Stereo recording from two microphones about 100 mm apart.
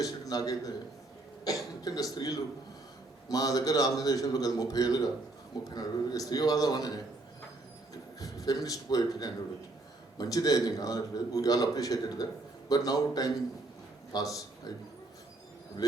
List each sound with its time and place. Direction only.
0.0 s a man's voice: 40° left (ahead or behind)
8.2 s a man's voice: 35° left (ahead or behind)
15.8 s a man's voice: 40° left (ahead or behind)